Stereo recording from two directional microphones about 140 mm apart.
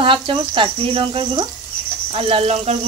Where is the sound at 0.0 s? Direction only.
35° right (ahead or behind).